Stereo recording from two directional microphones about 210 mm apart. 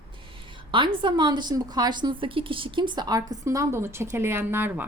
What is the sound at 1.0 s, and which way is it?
A woman's voice, 20° right (ahead or behind).